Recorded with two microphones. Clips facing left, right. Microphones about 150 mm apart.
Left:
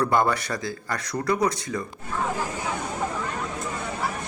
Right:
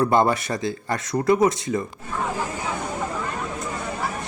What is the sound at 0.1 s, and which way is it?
Speech, 25° right (ahead or behind).